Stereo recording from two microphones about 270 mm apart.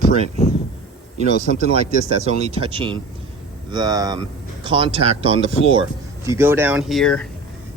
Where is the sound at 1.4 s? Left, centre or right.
Right.